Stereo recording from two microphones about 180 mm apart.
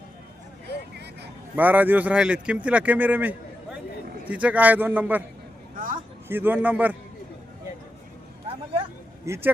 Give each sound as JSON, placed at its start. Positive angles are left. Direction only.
{"t": 1.5, "sound": "a man's voice", "side_deg": -10}
{"t": 5.7, "sound": "a sound", "side_deg": -50}
{"t": 6.2, "sound": "a man's voice", "side_deg": -10}
{"t": 9.2, "sound": "a man's voice", "side_deg": -15}